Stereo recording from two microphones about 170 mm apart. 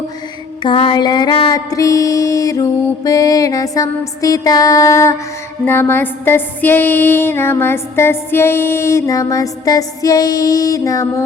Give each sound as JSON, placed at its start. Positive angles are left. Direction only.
{"t": 0.6, "sound": "music", "side_deg": 30}